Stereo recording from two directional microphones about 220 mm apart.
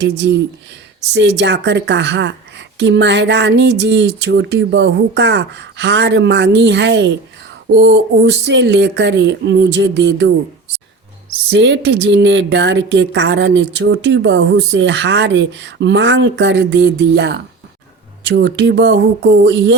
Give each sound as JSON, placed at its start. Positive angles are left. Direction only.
{"t": 0.0, "sound": "a woman's voice", "side_deg": -50}
{"t": 11.4, "sound": "a woman's voice", "side_deg": -55}